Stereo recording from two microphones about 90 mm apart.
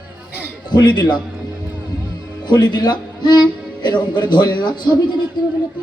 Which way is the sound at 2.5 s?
55° left (ahead or behind).